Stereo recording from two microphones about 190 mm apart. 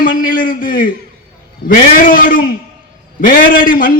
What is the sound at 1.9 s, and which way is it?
A man's voice, 45° left (ahead or behind).